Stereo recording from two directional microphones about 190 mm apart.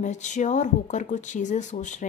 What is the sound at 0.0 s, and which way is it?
Speech, 40° left (ahead or behind).